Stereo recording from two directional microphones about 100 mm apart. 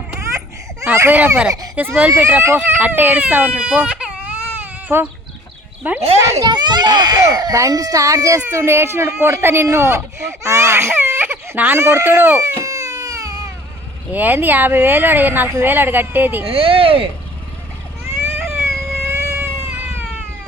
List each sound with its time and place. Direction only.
0.2 s baby cry: 30° right (ahead or behind)
0.9 s speech: 20° right (ahead or behind)
4.9 s speech: 25° right (ahead or behind)
6.4 s a child's voice: 45° right (ahead or behind); by 12.4 s 20° right (ahead or behind)
12.4 s a sound: 30° right (ahead or behind)
14.1 s speech: 15° right (ahead or behind)
16.5 s speech: 65° right (ahead or behind)
18.0 s baby cry: 25° right (ahead or behind)
18.3 s vehicle: 5° right (ahead or behind)
18.9 s a sound: 25° right (ahead or behind)